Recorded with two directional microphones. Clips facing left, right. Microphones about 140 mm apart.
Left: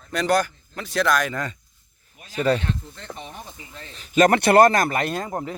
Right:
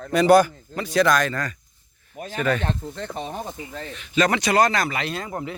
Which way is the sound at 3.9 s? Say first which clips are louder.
Left 4 dB; 40° left (ahead or behind).